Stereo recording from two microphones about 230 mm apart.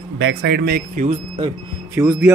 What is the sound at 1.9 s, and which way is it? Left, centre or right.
Speech, centre.